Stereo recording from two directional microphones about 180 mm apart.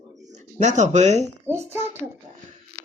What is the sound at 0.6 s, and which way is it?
Speech, 40° right (ahead or behind).